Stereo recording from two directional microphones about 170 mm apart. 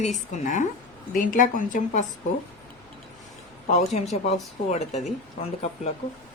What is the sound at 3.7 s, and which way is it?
Speech, 40° left (ahead or behind).